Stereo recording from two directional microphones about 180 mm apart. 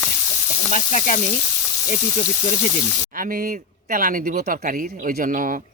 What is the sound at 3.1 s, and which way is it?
Speech, 50° right (ahead or behind).